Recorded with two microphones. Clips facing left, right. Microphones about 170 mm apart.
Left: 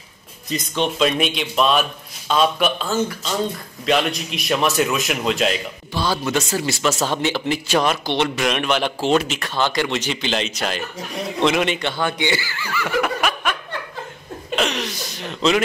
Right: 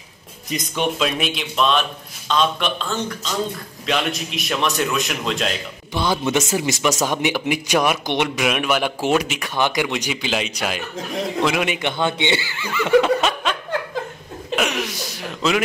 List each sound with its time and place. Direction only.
0.5 s speech: 15° right (ahead or behind)
0.9 s a man's voice: centre (ahead or behind)
5.9 s speech: 20° right (ahead or behind)
14.5 s hiccup: 10° right (ahead or behind)